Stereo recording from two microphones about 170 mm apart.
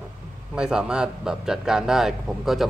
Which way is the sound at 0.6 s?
5° right (ahead or behind).